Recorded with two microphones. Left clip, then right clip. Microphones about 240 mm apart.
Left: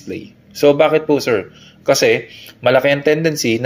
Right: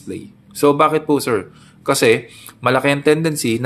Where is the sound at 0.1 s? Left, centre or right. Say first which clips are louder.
Left 2 dB; centre.